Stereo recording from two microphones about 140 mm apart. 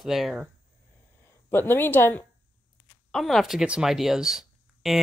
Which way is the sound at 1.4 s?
15° left (ahead or behind).